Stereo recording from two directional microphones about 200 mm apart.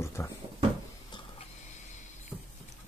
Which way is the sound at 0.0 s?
15° left (ahead or behind).